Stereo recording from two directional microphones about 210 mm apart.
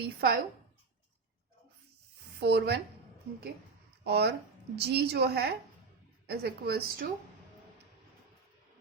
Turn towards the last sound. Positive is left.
turn(degrees=-50)  # may be behind; listen again after turning